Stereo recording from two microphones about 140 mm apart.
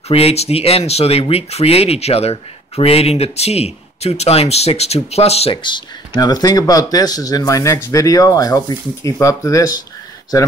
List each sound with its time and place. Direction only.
0.1 s speech: 45° left (ahead or behind); by 9.8 s 25° left (ahead or behind)